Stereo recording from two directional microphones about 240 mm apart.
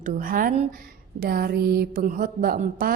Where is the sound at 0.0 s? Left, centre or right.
Right.